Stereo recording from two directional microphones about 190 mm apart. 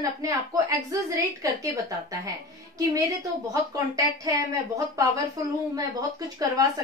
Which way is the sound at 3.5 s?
20° right (ahead or behind).